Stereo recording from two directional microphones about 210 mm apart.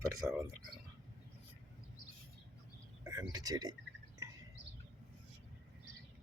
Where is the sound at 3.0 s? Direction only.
15° right (ahead or behind).